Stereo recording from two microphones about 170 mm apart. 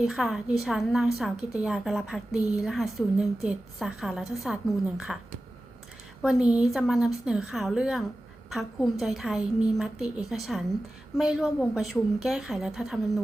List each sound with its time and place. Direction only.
0.0 s a woman's voice: 5° right (ahead or behind)
6.2 s a woman's voice: 5° right (ahead or behind)